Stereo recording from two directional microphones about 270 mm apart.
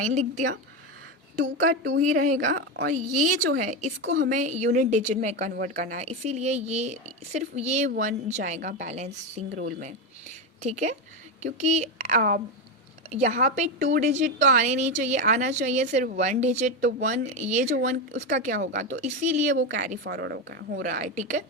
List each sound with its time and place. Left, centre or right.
0.0 s a woman's voice: right
1.6 s a woman's voice: right
18.5 s a woman's voice: right
19.5 s speech: right
19.8 s a woman's voice: right